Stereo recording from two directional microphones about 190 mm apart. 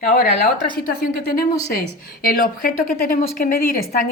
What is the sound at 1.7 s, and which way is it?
A woman's voice, 50° left (ahead or behind).